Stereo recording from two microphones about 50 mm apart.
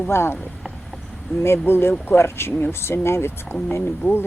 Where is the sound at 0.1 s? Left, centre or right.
Left.